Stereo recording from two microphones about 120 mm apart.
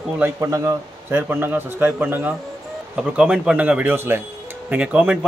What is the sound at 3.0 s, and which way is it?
Speech, 5° right (ahead or behind).